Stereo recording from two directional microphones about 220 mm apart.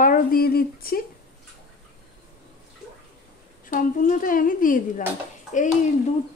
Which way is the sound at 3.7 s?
40° left (ahead or behind).